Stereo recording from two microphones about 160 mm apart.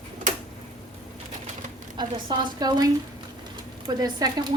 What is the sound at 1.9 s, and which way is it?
A woman's voice, 30° right (ahead or behind).